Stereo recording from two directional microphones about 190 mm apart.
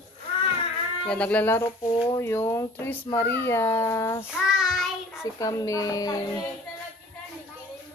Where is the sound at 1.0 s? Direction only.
5° left (ahead or behind).